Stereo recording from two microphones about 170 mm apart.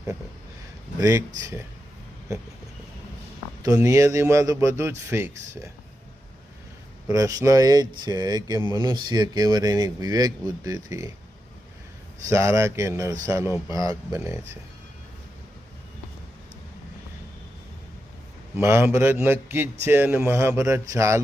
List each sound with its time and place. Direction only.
0.9 s a man's voice: 20° right (ahead or behind)
3.6 s a man's voice: 20° right (ahead or behind)
7.1 s speech: 20° right (ahead or behind)
12.3 s a man's voice: 15° right (ahead or behind)
18.5 s a man's voice: 15° right (ahead or behind)